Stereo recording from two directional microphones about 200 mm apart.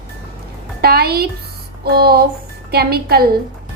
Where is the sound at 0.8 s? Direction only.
50° right (ahead or behind).